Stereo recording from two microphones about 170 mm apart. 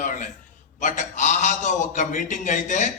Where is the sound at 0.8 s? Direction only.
45° left (ahead or behind).